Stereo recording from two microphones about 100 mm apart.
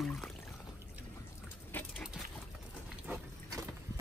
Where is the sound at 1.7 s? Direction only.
15° left (ahead or behind).